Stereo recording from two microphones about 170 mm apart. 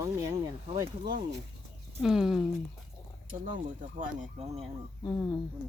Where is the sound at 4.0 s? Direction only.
45° right (ahead or behind).